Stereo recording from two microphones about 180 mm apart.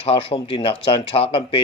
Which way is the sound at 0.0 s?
30° left (ahead or behind).